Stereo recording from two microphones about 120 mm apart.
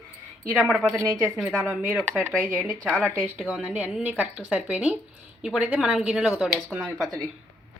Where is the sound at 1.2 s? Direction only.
10° right (ahead or behind).